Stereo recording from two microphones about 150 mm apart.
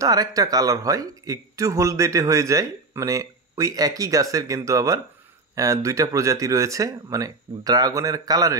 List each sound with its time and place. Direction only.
0.0 s speech: 25° right (ahead or behind)